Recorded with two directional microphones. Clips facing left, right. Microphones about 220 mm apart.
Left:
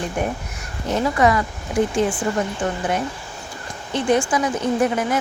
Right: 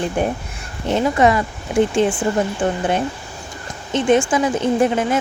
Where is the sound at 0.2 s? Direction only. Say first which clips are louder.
Right 4 dB; 30° right (ahead or behind).